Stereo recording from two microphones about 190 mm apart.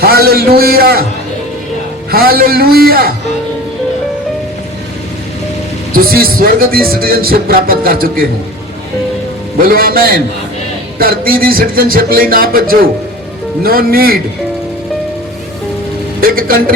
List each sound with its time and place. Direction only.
0.0 s a man's voice: 55° right (ahead or behind)
2.0 s speech: 55° right (ahead or behind)
5.9 s speech: 50° right (ahead or behind)
9.6 s speech: 50° right (ahead or behind)
16.2 s speech: 50° right (ahead or behind)